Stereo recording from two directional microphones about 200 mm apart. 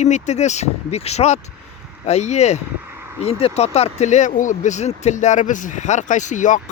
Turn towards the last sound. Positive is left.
turn(degrees=40)  # may be behind; listen again after turning